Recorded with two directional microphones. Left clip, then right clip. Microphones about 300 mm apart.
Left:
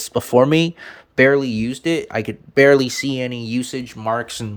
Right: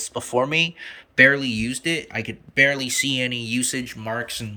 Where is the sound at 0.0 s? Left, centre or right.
Left.